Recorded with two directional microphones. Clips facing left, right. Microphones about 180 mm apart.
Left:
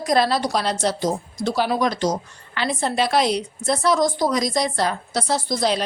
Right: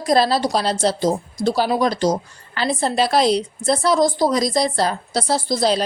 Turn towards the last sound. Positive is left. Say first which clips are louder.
# right 3 dB
turn(degrees=-35)  # may be behind; listen again after turning